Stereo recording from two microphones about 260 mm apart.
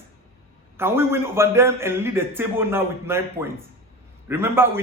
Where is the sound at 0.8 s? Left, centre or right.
Centre.